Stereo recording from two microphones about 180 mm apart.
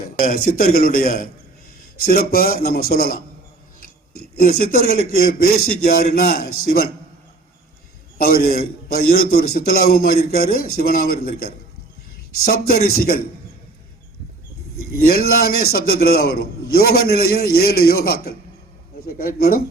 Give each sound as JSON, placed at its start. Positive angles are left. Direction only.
{"t": 0.3, "sound": "a man's voice", "side_deg": 55}
{"t": 8.2, "sound": "a man's voice", "side_deg": 55}
{"t": 14.8, "sound": "a man's voice", "side_deg": 60}